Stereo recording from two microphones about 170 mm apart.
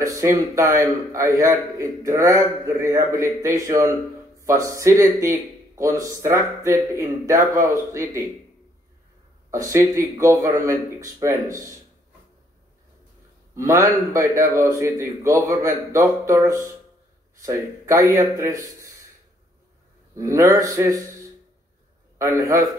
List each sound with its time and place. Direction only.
0.0 s a man's voice: 15° right (ahead or behind)
5.2 s a sound: 20° right (ahead or behind)
5.9 s a man's voice: 20° right (ahead or behind)
9.5 s speech: 15° right (ahead or behind)
13.6 s a man's voice: 15° right (ahead or behind)
20.2 s speech: 20° right (ahead or behind)
22.2 s speech: 20° right (ahead or behind)